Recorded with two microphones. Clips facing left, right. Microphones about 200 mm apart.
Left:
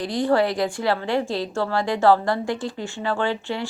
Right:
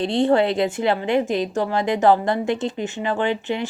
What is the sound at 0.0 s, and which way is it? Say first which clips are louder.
A woman's voice: right 3 dB; 25° right (ahead or behind).